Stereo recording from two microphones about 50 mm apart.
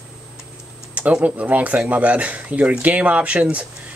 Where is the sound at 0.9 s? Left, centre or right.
Right.